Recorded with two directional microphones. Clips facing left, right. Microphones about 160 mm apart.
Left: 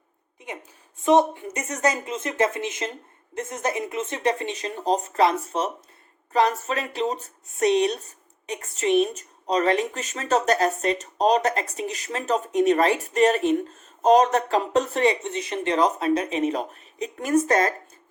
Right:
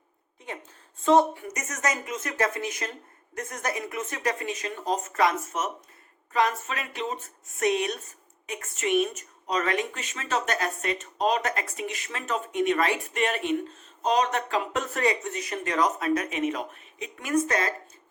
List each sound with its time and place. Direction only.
0.3 s a woman's voice: 15° left (ahead or behind)
1.5 s speech: 30° left (ahead or behind)